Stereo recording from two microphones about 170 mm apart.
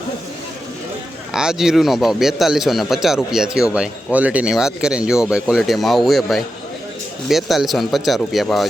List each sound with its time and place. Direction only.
1.3 s speech: 5° right (ahead or behind)